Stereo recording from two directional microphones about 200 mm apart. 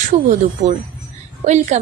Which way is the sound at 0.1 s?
40° right (ahead or behind).